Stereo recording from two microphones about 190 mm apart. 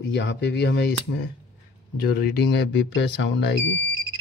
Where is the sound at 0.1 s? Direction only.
65° left (ahead or behind).